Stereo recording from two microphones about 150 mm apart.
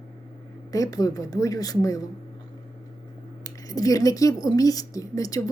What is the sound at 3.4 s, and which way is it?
Speech, 25° left (ahead or behind).